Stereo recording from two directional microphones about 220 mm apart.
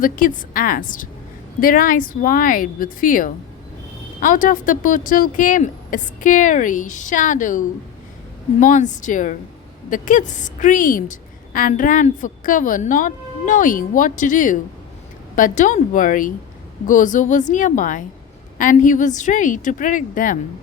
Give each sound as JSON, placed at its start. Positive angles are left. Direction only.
{"t": 0.0, "sound": "a woman's voice", "side_deg": 40}